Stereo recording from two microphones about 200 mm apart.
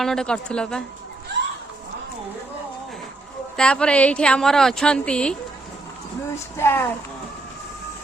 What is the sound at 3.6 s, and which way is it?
Speech, 5° left (ahead or behind).